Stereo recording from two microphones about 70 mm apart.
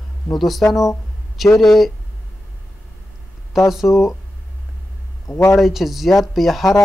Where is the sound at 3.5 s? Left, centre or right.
Centre.